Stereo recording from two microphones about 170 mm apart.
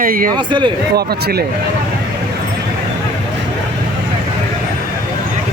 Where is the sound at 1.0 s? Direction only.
70° right (ahead or behind).